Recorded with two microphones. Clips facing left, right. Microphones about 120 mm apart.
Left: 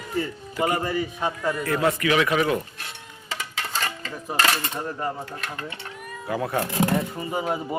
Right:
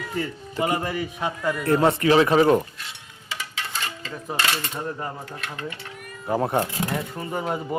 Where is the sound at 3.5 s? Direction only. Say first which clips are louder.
Left 3 dB; 40° left (ahead or behind).